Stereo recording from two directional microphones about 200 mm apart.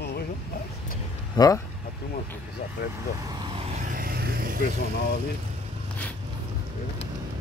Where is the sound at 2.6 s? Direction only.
35° left (ahead or behind).